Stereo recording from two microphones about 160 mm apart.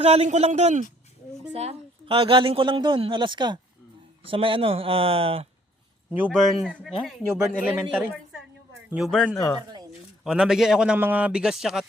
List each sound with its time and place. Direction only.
0.0 s a man's voice: 40° right (ahead or behind)
1.5 s a woman's voice: 35° right (ahead or behind)
6.1 s speech: 10° right (ahead or behind)
6.3 s a man's voice: centre (ahead or behind)